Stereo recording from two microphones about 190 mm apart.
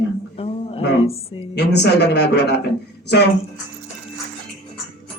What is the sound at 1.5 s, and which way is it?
Speech, 60° left (ahead or behind).